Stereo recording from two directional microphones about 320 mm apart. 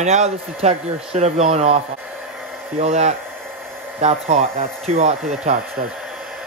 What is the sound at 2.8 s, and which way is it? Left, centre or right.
Speech, centre.